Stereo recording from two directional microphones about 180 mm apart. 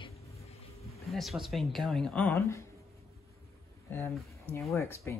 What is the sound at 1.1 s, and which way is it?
Speech, centre (ahead or behind).